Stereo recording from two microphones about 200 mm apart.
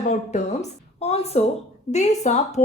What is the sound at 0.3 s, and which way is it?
A woman's voice, 35° left (ahead or behind).